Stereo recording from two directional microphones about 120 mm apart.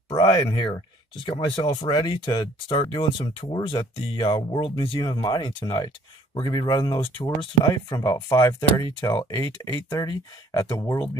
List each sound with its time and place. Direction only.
0.1 s speech: 40° left (ahead or behind)